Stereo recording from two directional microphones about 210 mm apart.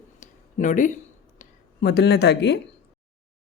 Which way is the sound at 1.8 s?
50° left (ahead or behind).